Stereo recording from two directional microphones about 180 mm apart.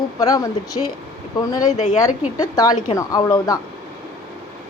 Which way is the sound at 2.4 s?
20° left (ahead or behind).